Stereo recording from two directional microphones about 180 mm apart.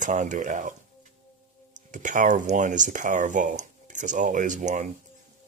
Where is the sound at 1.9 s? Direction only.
45° right (ahead or behind).